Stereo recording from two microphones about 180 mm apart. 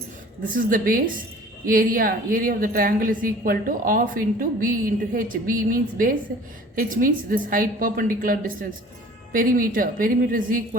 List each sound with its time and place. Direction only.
0.5 s a woman's voice: 50° right (ahead or behind)